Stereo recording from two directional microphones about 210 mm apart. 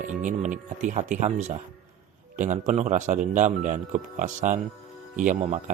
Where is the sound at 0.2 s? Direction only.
35° right (ahead or behind).